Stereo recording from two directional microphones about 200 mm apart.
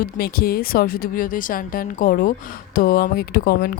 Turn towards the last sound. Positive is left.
turn(degrees=50)  # may be behind; listen again after turning